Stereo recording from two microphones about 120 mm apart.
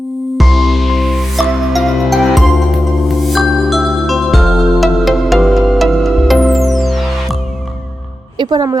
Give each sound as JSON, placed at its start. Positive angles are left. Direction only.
{"t": 0.3, "sound": "music", "side_deg": 0}
{"t": 8.4, "sound": "speech", "side_deg": -35}